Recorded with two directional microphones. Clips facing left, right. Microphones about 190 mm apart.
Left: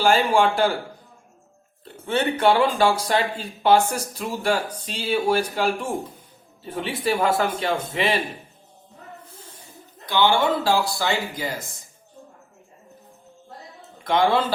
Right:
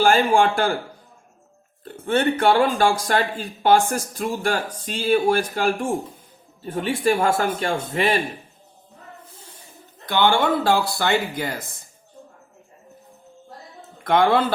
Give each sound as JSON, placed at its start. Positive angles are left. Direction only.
{"t": 0.0, "sound": "speech", "side_deg": -50}
{"t": 1.8, "sound": "speech", "side_deg": -50}
{"t": 10.1, "sound": "speech", "side_deg": -55}
{"t": 14.0, "sound": "a man's voice", "side_deg": -55}